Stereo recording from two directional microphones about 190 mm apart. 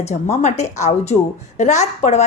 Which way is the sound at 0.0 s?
35° left (ahead or behind).